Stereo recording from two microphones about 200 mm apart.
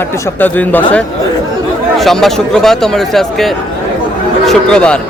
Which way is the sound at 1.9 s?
Centre (ahead or behind).